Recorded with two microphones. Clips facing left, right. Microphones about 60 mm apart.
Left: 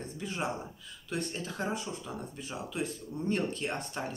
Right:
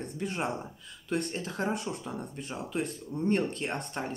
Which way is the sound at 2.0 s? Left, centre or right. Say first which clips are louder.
Right 2 dB; right.